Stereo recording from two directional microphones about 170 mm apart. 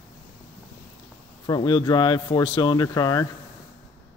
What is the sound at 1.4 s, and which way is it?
Speech, 25° left (ahead or behind).